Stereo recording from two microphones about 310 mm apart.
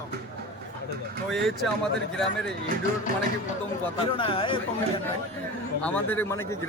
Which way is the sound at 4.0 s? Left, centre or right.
Centre.